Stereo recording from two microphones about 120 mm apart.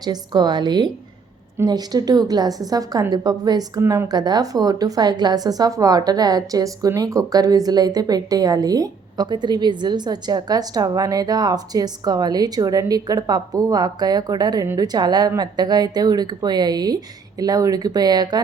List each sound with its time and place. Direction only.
0.0 s a woman's voice: 35° right (ahead or behind)